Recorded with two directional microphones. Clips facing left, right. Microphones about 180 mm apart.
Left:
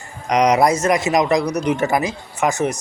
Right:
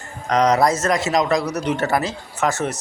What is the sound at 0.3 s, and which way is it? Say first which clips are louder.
Speech: left 2 dB; 15° left (ahead or behind).